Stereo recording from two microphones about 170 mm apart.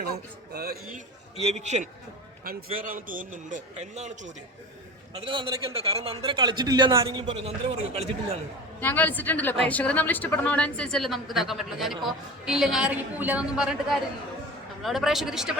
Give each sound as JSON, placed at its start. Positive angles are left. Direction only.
{"t": 0.0, "sound": "a man's voice", "side_deg": -70}
{"t": 0.9, "sound": "a man's voice", "side_deg": -40}
{"t": 2.4, "sound": "a man's voice", "side_deg": -65}
{"t": 5.2, "sound": "a man's voice", "side_deg": -30}
{"t": 8.8, "sound": "a woman's voice", "side_deg": 10}
{"t": 14.8, "sound": "speech", "side_deg": 0}